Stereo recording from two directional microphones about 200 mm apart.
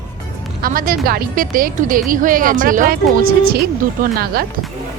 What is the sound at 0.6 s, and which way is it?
A woman's voice, 45° right (ahead or behind).